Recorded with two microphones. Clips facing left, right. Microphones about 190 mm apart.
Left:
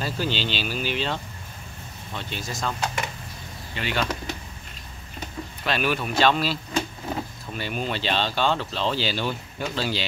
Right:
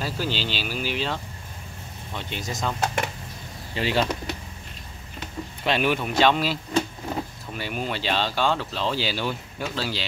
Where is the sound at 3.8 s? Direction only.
30° right (ahead or behind).